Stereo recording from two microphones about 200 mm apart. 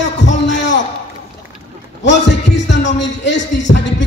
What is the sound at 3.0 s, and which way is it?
A man's voice, 65° left (ahead or behind).